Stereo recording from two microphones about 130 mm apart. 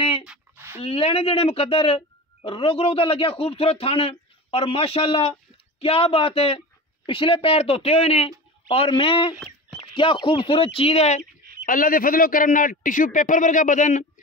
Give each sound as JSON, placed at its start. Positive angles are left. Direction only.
{"t": 0.7, "sound": "speech", "side_deg": 50}
{"t": 11.6, "sound": "a man's voice", "side_deg": 90}